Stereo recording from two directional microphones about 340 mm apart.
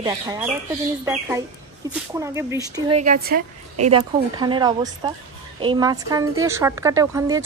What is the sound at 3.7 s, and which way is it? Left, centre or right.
Speech, right.